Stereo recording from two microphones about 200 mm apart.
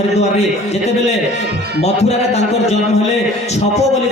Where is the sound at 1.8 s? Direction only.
30° left (ahead or behind).